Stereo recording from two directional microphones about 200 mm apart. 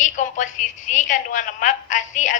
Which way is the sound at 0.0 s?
40° left (ahead or behind).